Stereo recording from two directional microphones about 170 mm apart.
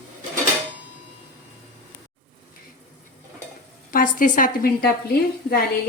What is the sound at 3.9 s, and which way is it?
A woman's voice, 55° left (ahead or behind).